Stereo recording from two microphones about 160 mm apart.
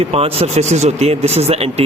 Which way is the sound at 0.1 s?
40° right (ahead or behind).